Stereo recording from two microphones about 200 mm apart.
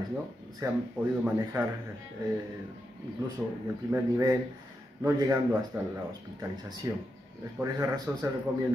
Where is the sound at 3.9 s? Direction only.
15° right (ahead or behind).